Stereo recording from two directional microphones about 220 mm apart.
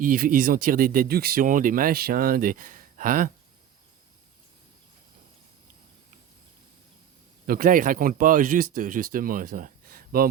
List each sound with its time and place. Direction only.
0.0 s speech: 40° right (ahead or behind)
7.4 s speech: 40° right (ahead or behind)